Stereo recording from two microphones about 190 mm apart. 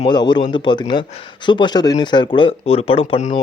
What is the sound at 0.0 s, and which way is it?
Speech, 25° left (ahead or behind).